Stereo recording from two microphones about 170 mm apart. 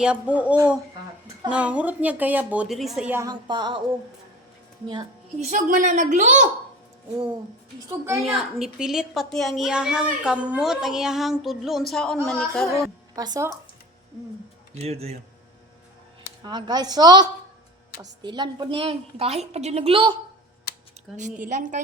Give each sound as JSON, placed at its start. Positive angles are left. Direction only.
{"t": 0.0, "sound": "speech", "side_deg": -5}
{"t": 3.1, "sound": "speech", "side_deg": -15}
{"t": 3.4, "sound": "a woman's voice", "side_deg": -25}
{"t": 5.4, "sound": "a woman's voice", "side_deg": -45}
{"t": 7.9, "sound": "speech", "side_deg": -15}
{"t": 8.4, "sound": "a child's voice", "side_deg": 0}
{"t": 13.1, "sound": "a woman's voice", "side_deg": -20}
{"t": 14.8, "sound": "a woman's voice", "side_deg": -40}
{"t": 16.4, "sound": "a woman's voice", "side_deg": -25}
{"t": 21.2, "sound": "a woman's voice", "side_deg": -45}